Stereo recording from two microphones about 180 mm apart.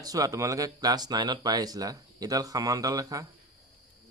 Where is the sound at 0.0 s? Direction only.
20° right (ahead or behind).